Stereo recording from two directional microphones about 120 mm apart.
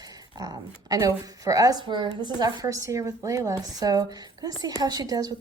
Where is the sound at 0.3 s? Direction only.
30° right (ahead or behind).